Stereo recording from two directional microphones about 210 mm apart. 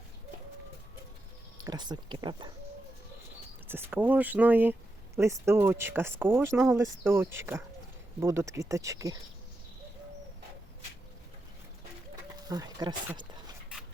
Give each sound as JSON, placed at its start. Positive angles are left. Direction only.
{"t": 1.6, "sound": "speech", "side_deg": -20}
{"t": 3.7, "sound": "speech", "side_deg": -10}
{"t": 12.5, "sound": "speech", "side_deg": -20}